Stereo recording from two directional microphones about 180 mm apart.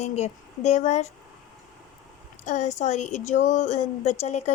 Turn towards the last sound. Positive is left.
turn(degrees=40)  # may be behind; listen again after turning